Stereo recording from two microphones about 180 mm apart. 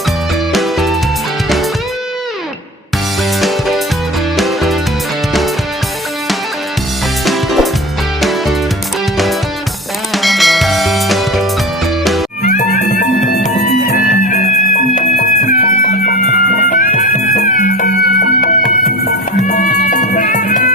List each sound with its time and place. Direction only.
0.5 s music: centre (ahead or behind)
4.4 s music: centre (ahead or behind)
7.3 s music: centre (ahead or behind)
10.2 s music: centre (ahead or behind)
12.4 s music: 45° left (ahead or behind)